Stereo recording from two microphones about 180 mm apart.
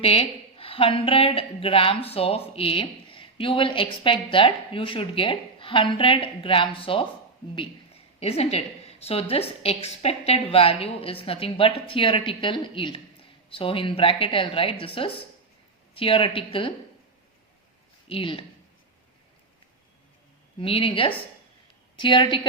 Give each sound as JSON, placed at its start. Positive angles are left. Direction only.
{"t": 0.0, "sound": "a woman's voice", "side_deg": 30}
{"t": 18.1, "sound": "a woman's voice", "side_deg": 30}
{"t": 20.6, "sound": "a woman's voice", "side_deg": 30}